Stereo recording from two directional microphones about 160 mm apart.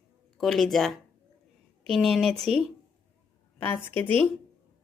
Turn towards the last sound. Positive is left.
turn(degrees=10)  # may be behind; listen again after turning